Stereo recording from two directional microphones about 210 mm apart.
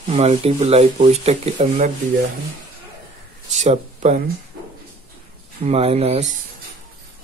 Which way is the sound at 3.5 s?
35° right (ahead or behind).